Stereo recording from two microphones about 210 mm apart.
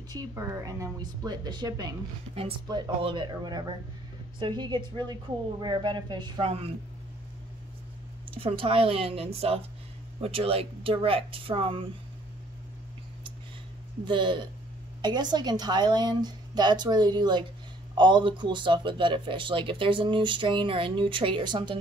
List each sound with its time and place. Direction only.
0.1 s speech: 15° right (ahead or behind)
8.4 s speech: 25° right (ahead or behind)
14.0 s speech: 25° right (ahead or behind)